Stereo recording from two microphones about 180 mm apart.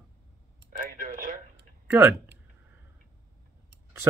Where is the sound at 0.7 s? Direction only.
50° right (ahead or behind).